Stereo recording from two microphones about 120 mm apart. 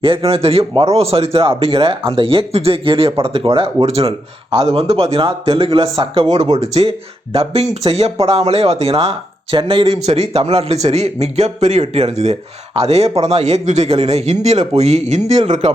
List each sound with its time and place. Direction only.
0.0 s speech: 50° right (ahead or behind)
6.0 s speech: 35° right (ahead or behind)
6.3 s speech: 65° right (ahead or behind); by 10.0 s 45° right (ahead or behind)
10.1 s speech: 55° right (ahead or behind)